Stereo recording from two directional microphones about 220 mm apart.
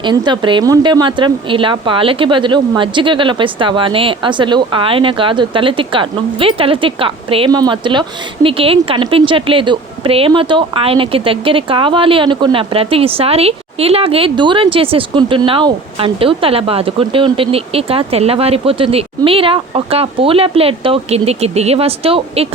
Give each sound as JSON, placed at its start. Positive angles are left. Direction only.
{"t": 0.0, "sound": "a woman's voice", "side_deg": -20}